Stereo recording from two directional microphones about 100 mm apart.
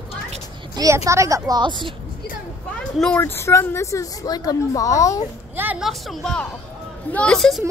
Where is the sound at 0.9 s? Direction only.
30° right (ahead or behind).